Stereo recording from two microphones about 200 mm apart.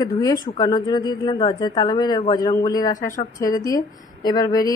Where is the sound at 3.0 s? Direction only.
40° left (ahead or behind).